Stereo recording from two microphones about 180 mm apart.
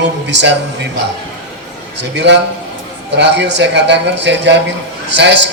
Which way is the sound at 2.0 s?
75° right (ahead or behind).